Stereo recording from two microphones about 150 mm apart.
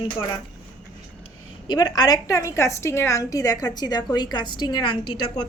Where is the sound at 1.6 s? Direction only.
30° left (ahead or behind).